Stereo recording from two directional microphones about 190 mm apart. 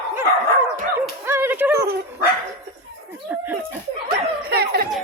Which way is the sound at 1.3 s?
10° right (ahead or behind).